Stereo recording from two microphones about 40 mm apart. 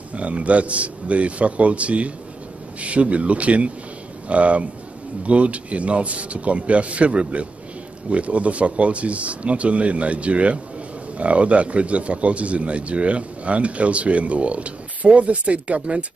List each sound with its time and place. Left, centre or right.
0.1 s speech: right